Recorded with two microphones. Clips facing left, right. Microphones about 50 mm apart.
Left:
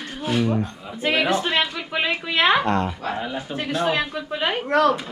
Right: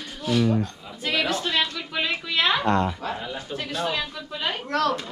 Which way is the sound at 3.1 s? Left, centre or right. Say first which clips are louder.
Left 4 dB; centre.